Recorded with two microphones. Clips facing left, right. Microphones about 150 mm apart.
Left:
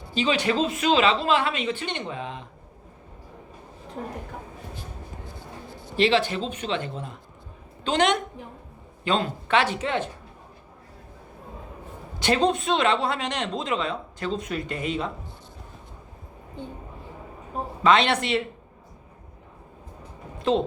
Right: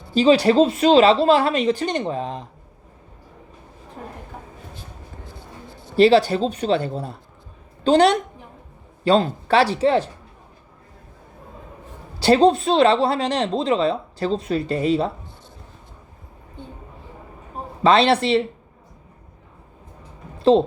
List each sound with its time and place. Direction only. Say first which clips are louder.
0.1 s speech: right 9 dB; 35° right (ahead or behind)
6.0 s speech: right 8 dB; 40° right (ahead or behind)
12.2 s speech: right 7 dB; 35° right (ahead or behind)
17.8 s speech: right 5 dB; 30° right (ahead or behind)
20.4 s a woman's voice: right 8 dB; 30° right (ahead or behind)